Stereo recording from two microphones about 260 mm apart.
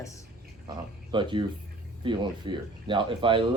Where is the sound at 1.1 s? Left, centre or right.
Centre.